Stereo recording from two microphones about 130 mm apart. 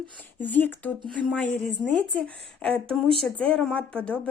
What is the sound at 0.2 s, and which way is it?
Speech, 15° left (ahead or behind).